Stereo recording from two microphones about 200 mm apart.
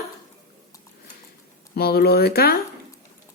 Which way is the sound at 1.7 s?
50° left (ahead or behind).